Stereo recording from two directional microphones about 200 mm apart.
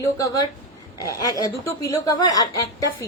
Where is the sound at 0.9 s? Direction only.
15° left (ahead or behind).